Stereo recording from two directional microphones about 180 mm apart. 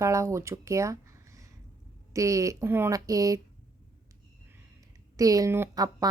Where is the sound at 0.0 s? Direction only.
15° right (ahead or behind).